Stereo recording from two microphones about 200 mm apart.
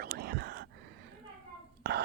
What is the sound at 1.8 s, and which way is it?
Burping, 55° right (ahead or behind).